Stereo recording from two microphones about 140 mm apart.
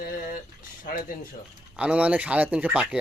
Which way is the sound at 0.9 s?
85° left.